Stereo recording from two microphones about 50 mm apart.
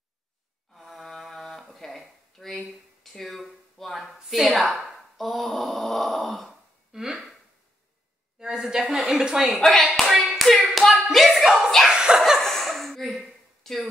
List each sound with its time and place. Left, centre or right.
0.7 s a sound: centre
4.3 s speech: centre
8.4 s speech: centre
9.6 s speech: centre
9.9 s tap: centre
10.3 s hands: centre
10.7 s clapping: centre
11.1 s a sound: centre
11.9 s snicker: centre
12.4 s dog: centre